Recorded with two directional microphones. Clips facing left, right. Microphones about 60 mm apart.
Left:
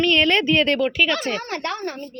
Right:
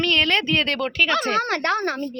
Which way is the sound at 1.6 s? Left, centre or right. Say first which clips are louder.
Right 5 dB; right.